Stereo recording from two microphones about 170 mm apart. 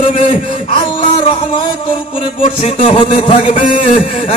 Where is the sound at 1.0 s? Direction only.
30° left (ahead or behind).